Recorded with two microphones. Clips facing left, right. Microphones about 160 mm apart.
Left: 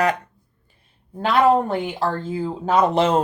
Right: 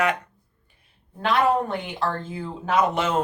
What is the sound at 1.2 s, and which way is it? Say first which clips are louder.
Speech: left 4 dB; 30° left (ahead or behind).